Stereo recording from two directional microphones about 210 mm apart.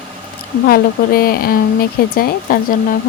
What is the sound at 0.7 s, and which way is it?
Speech, 45° left (ahead or behind).